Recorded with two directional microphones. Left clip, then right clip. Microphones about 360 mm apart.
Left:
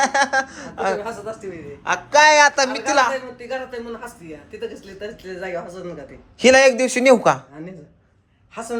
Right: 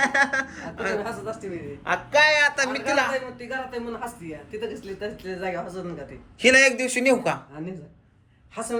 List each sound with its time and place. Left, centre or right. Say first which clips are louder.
0.0 s speech: left 4 dB; centre
1.2 s speech: left 2 dB; left
1.8 s speech: left 4 dB; centre
2.1 s speech: left 6 dB; centre
4.6 s speech: left 2 dB; centre